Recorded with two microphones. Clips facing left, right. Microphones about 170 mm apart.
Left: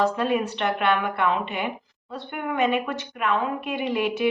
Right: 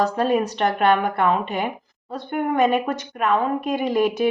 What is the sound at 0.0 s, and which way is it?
Speech, 40° right (ahead or behind).